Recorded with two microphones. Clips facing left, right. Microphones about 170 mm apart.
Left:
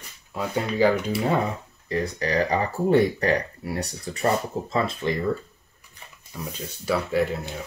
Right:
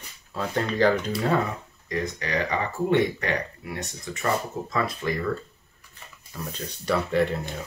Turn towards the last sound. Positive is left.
turn(degrees=5)  # may be behind; listen again after turning